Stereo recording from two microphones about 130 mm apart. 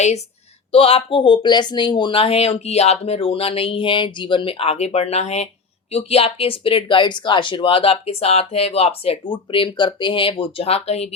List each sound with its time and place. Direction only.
0.7 s speech: 45° left (ahead or behind)